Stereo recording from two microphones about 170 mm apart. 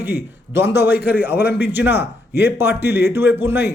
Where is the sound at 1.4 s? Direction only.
70° left (ahead or behind).